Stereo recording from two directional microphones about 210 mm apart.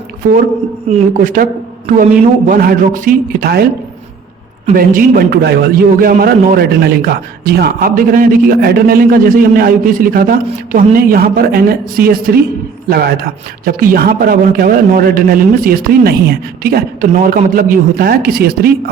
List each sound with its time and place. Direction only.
0.9 s a man's voice: 40° right (ahead or behind)
2.5 s a man's voice: 40° right (ahead or behind)